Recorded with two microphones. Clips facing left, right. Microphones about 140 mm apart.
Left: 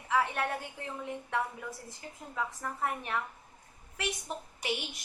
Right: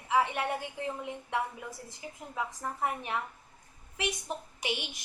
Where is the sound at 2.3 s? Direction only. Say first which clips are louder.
Even; 20° right (ahead or behind).